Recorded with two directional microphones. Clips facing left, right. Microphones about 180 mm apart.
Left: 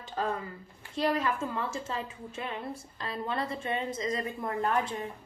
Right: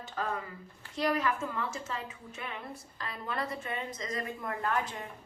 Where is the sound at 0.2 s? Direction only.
30° left (ahead or behind).